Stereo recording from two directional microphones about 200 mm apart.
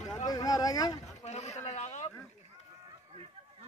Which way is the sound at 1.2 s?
35° left (ahead or behind).